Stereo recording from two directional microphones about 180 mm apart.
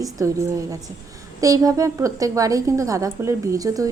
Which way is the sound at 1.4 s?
20° right (ahead or behind).